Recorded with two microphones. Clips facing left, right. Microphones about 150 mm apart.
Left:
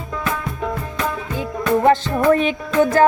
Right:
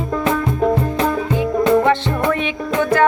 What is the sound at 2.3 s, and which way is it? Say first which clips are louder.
Music: left 3 dB; 40° left (ahead or behind).